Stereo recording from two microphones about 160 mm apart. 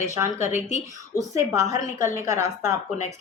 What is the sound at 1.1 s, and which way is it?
Speech, 20° right (ahead or behind).